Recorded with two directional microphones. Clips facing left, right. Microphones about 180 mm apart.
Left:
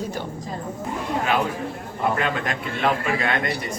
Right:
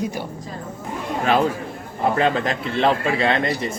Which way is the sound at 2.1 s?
30° right (ahead or behind).